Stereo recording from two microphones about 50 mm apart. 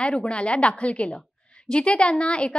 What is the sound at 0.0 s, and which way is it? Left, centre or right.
A woman's voice, left.